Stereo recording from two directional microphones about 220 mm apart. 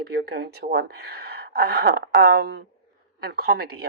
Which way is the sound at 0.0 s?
50° right (ahead or behind).